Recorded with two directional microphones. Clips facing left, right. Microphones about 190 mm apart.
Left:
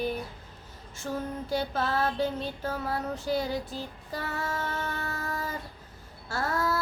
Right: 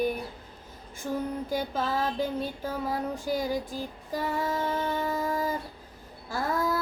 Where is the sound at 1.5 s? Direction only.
10° right (ahead or behind).